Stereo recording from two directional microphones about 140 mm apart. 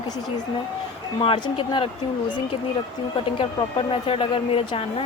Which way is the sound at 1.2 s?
40° left (ahead or behind).